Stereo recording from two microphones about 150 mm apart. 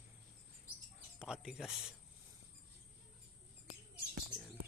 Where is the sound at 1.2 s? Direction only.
5° right (ahead or behind).